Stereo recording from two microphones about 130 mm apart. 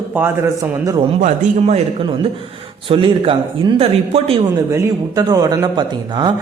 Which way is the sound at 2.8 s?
45° right (ahead or behind).